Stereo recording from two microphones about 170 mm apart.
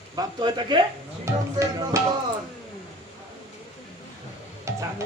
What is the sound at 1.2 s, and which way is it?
Speech, 15° right (ahead or behind).